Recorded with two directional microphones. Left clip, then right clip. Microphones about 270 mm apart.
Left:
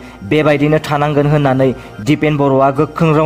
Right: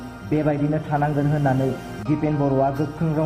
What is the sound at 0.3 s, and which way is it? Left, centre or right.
A man's voice, left.